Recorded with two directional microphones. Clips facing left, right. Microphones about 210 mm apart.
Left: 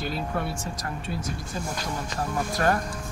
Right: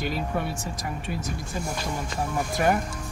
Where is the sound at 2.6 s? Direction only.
10° right (ahead or behind).